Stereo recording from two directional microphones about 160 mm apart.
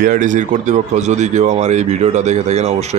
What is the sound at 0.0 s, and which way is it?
Speech, 55° right (ahead or behind).